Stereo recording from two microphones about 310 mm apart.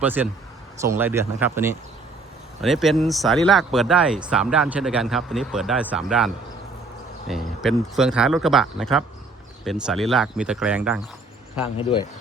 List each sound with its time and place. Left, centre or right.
0.0 s speech: centre
11.8 s speech: centre